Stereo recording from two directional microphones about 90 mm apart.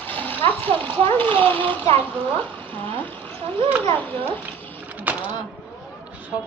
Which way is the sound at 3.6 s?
90° right.